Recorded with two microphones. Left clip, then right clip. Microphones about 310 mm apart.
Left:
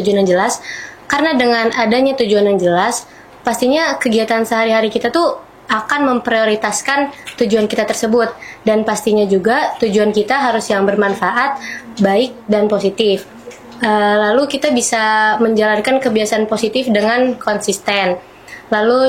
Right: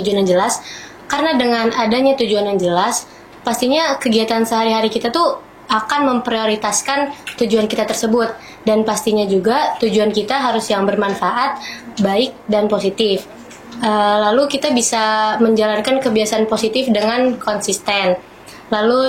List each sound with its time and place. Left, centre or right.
0.0 s a woman's voice: left